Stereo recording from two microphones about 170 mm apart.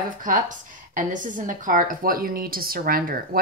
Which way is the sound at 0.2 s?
50° right (ahead or behind).